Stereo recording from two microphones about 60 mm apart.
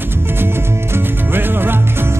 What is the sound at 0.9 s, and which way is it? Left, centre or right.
Music, right.